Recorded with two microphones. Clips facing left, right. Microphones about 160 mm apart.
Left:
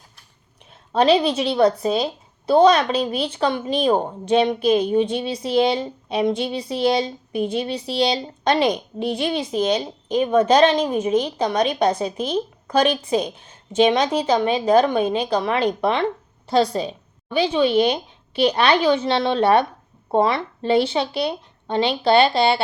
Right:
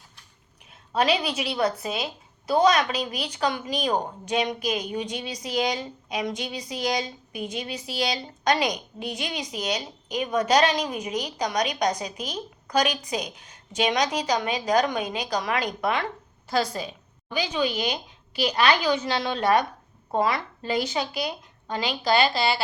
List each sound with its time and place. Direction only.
0.9 s a woman's voice: 30° left (ahead or behind)